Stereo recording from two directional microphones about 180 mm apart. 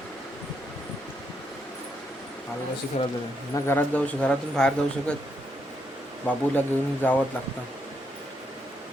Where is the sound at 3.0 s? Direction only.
35° left (ahead or behind).